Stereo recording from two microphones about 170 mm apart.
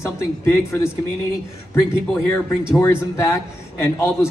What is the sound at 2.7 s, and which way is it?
Speech, 15° left (ahead or behind).